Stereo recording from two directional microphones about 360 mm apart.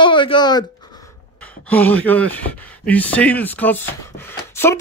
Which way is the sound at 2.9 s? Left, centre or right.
Centre.